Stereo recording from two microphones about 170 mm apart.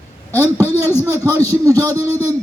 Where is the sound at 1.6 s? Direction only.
20° right (ahead or behind).